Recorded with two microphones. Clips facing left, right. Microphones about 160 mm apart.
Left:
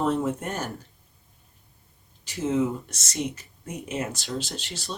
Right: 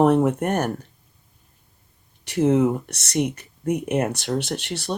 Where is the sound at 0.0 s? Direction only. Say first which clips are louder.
Right 8 dB; 60° right (ahead or behind).